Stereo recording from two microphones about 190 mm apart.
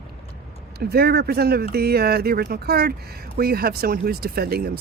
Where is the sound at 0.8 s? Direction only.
55° right (ahead or behind).